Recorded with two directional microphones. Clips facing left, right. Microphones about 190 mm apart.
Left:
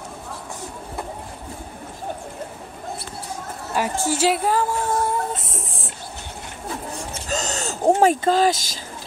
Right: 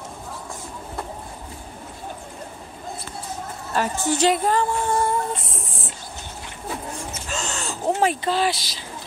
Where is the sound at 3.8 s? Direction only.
5° left (ahead or behind).